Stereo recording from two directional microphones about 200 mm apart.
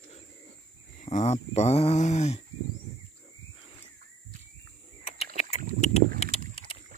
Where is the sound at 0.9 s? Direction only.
35° left (ahead or behind).